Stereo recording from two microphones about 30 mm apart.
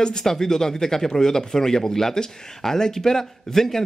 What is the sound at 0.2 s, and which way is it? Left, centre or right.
Speech, centre.